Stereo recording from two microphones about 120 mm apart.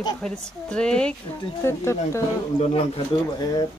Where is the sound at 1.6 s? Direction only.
20° left (ahead or behind).